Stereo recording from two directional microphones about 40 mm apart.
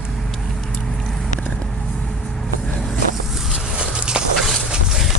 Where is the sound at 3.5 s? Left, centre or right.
Right.